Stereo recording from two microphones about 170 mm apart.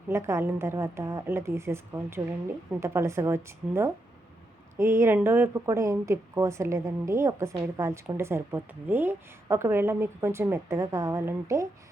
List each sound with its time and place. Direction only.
0.1 s a woman's voice: 15° right (ahead or behind)